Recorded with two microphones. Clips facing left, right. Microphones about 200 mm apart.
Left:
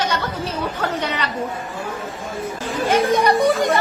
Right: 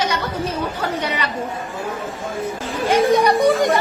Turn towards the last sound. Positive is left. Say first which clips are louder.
# right 1 dB
turn(degrees=-15)  # may be behind; listen again after turning